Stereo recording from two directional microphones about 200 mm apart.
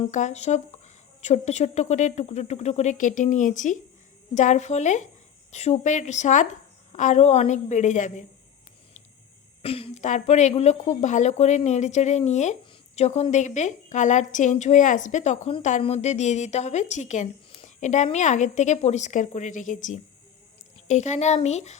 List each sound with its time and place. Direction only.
0.1 s a woman's voice: 35° left (ahead or behind)
9.6 s a woman's voice: 30° left (ahead or behind)